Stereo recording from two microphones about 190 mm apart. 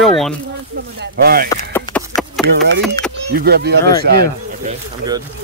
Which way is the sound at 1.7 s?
10° left (ahead or behind).